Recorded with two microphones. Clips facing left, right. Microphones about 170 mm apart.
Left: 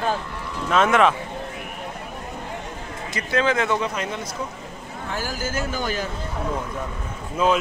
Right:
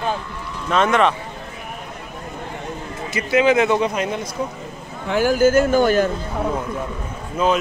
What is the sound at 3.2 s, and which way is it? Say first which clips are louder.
Speech: right 6 dB; 10° right (ahead or behind).